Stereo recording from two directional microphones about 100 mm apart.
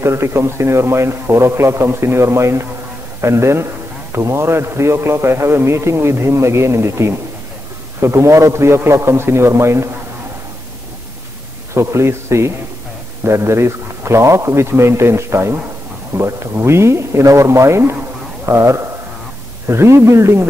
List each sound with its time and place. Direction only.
0.0 s a man's voice: 25° right (ahead or behind)
11.7 s a man's voice: 30° right (ahead or behind)
17.9 s a sound: 25° right (ahead or behind)
19.7 s a man's voice: 25° right (ahead or behind)